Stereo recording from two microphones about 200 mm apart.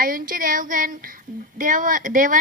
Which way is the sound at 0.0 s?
45° right (ahead or behind).